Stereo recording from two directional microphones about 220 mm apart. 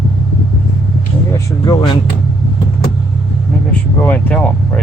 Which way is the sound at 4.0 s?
5° left (ahead or behind).